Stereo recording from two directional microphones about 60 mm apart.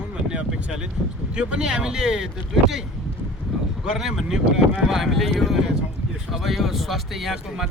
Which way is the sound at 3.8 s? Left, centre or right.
Centre.